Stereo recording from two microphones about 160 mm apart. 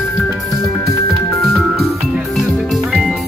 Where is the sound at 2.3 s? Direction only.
Centre (ahead or behind).